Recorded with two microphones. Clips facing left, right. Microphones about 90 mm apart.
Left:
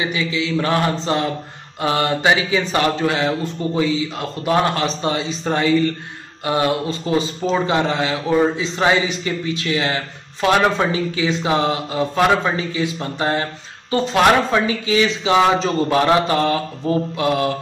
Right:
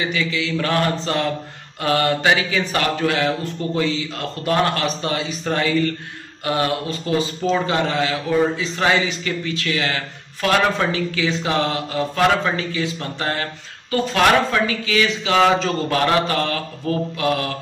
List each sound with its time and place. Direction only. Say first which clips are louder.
0.0 s speech: left 1 dB; 20° left (ahead or behind)